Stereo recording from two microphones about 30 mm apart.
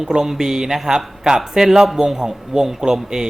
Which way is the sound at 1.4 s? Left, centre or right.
Centre.